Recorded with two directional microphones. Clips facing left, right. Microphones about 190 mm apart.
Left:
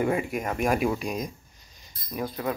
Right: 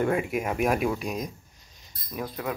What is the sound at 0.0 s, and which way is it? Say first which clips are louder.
Speech: right 1 dB; centre (ahead or behind).